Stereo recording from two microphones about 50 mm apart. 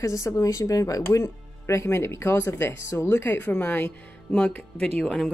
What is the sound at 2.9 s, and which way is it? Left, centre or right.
Speech, left.